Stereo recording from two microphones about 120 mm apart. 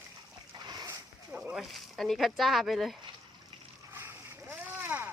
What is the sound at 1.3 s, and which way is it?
Speech, 5° right (ahead or behind).